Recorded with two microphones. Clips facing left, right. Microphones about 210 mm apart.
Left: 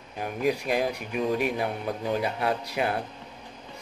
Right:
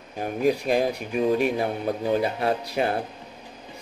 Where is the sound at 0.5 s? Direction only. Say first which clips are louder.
Right 4 dB; 35° right (ahead or behind).